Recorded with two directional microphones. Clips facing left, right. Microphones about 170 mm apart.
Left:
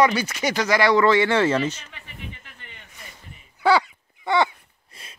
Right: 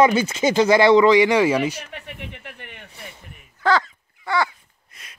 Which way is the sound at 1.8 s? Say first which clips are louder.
Right 5 dB; 70° right (ahead or behind).